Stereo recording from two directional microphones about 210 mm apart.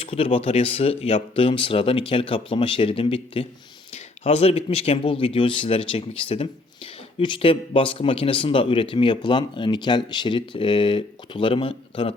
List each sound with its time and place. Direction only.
0.0 s speech: 25° left (ahead or behind)